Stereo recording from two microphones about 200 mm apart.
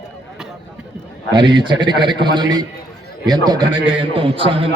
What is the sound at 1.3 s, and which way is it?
A man's voice, 20° right (ahead or behind).